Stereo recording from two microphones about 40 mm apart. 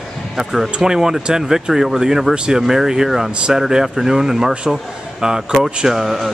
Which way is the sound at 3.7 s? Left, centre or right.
Centre.